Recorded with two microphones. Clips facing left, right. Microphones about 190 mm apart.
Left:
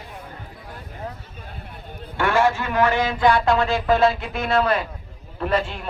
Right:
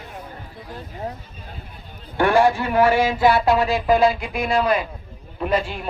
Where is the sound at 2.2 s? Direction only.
15° right (ahead or behind).